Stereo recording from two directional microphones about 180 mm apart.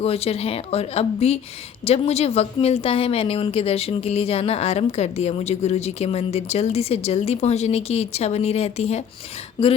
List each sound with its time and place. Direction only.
0.0 s a woman's voice: 35° left (ahead or behind)